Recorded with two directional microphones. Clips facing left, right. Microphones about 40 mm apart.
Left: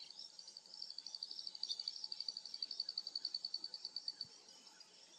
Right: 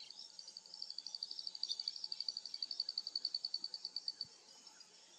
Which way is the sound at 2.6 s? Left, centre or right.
Left.